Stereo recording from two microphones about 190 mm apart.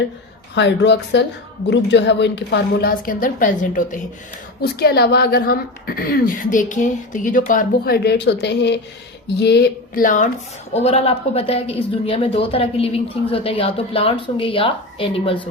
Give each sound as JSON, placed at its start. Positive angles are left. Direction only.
{"t": 0.5, "sound": "a woman's voice", "side_deg": 65}
{"t": 4.6, "sound": "a woman's voice", "side_deg": 55}
{"t": 10.8, "sound": "a woman's voice", "side_deg": 30}